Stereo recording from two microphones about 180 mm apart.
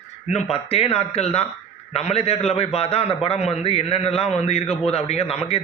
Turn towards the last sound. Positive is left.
turn(degrees=35)  # may be behind; listen again after turning